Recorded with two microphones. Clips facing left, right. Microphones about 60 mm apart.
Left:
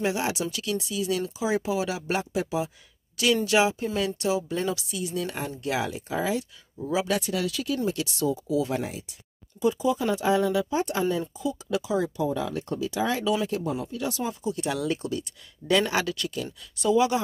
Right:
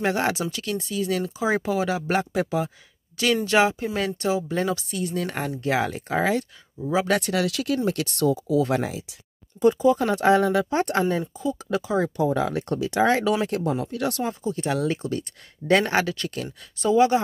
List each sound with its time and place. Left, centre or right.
0.0 s speech: right
5.9 s speech: right
9.8 s speech: right
11.1 s speech: right
12.2 s speech: right
14.4 s speech: right